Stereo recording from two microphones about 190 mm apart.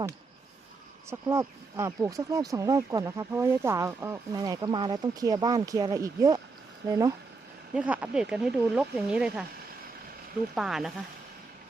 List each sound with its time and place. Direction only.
1.3 s speech: 15° right (ahead or behind)
7.8 s speech: 5° right (ahead or behind)
10.5 s speech: centre (ahead or behind)